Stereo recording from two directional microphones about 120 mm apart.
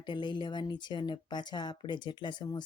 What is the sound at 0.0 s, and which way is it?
Speech, 40° left (ahead or behind).